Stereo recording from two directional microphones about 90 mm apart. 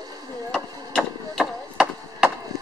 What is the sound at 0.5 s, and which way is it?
Chop, 5° left (ahead or behind).